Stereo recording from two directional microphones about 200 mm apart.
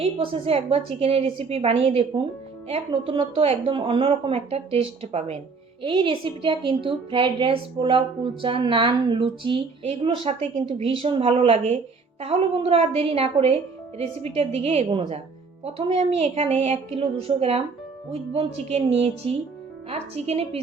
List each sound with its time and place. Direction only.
0.0 s a woman's voice: 25° right (ahead or behind)